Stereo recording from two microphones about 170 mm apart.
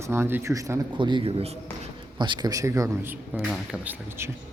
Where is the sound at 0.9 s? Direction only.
30° right (ahead or behind); by 3.4 s 15° right (ahead or behind).